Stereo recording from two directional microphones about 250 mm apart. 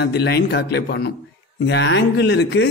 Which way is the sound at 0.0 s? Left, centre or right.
Left.